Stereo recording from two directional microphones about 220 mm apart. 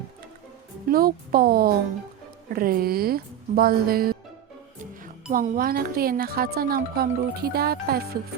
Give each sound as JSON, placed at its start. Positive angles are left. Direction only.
{"t": 0.9, "sound": "speech", "side_deg": -40}
{"t": 5.3, "sound": "speech", "side_deg": -40}